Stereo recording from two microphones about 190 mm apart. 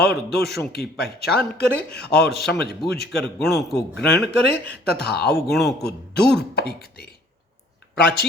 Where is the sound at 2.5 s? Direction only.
60° left (ahead or behind).